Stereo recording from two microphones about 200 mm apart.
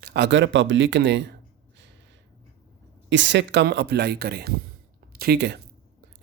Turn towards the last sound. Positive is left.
turn(degrees=-55)  # may be behind; listen again after turning